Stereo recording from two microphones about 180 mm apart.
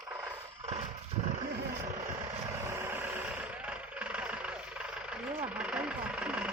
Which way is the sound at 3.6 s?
5° right (ahead or behind).